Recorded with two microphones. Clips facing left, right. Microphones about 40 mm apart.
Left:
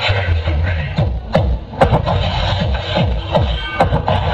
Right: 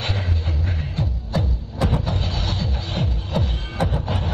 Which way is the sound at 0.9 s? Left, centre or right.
Left.